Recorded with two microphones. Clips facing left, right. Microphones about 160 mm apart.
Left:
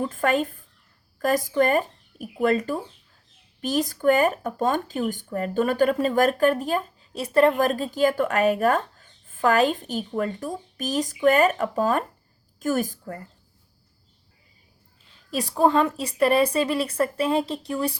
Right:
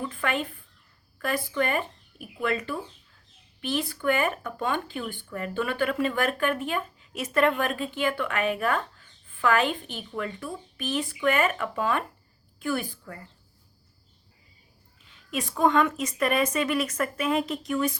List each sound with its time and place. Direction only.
0.0 s speech: 45° left (ahead or behind)
15.3 s speech: 35° left (ahead or behind)